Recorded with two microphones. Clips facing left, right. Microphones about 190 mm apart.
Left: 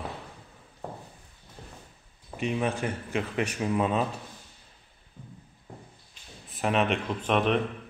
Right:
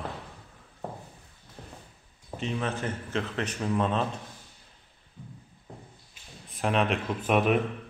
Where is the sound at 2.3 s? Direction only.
15° left (ahead or behind).